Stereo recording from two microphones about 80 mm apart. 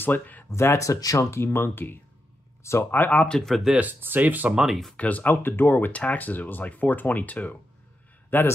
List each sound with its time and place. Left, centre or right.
0.0 s speech: left
0.5 s speech: left
1.4 s speech: left
3.3 s speech: centre
3.7 s speech: right
4.6 s speech: centre
4.9 s speech: centre